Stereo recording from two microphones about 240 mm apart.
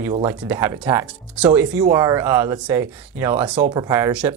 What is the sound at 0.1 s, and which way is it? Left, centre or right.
Speech, centre.